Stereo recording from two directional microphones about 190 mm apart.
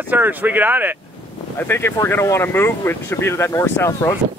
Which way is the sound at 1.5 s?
10° left (ahead or behind).